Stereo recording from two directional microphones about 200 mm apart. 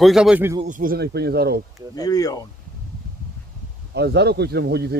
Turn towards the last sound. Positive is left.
turn(degrees=-55)  # may be behind; listen again after turning